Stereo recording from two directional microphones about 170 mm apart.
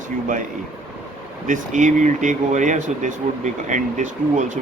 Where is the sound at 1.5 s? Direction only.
45° right (ahead or behind).